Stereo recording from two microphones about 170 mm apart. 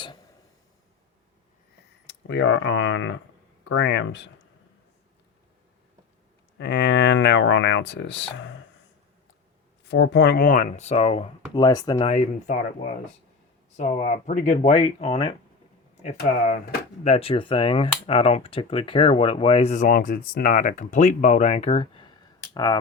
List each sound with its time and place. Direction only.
2.3 s speech: 90° left
6.6 s speech: 80° left
9.9 s speech: 85° left; by 11.6 s 35° left (ahead or behind)
11.6 s speech: 25° left (ahead or behind)
12.5 s speech: 45° left (ahead or behind)
22.5 s speech: 25° left (ahead or behind)